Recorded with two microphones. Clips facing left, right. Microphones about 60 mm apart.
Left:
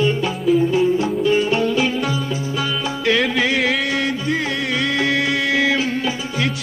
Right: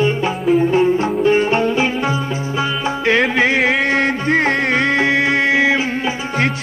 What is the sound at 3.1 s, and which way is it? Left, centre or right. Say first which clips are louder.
Music: right 3 dB; right.